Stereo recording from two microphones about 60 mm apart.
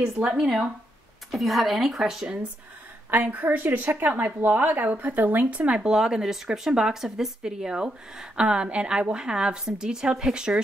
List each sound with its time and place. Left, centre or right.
0.4 s speech: centre
1.3 s speech: centre
3.1 s a woman's voice: right
5.6 s speech: centre